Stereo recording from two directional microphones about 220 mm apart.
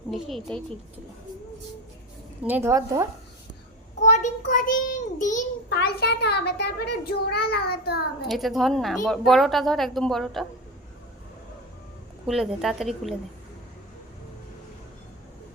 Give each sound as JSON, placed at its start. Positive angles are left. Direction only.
{"t": 0.1, "sound": "a woman's voice", "side_deg": 0}
{"t": 2.4, "sound": "a woman's voice", "side_deg": -10}
{"t": 4.0, "sound": "a child's voice", "side_deg": 30}
{"t": 5.6, "sound": "a child's voice", "side_deg": 50}
{"t": 8.3, "sound": "a woman's voice", "side_deg": 0}
{"t": 12.2, "sound": "a woman's voice", "side_deg": 0}